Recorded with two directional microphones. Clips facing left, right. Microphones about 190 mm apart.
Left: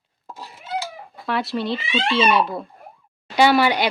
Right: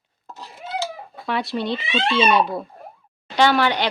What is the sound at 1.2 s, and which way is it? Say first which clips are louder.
Speech: even; centre (ahead or behind).